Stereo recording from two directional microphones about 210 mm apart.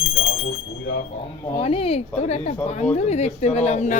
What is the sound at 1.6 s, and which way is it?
Speech, 25° left (ahead or behind).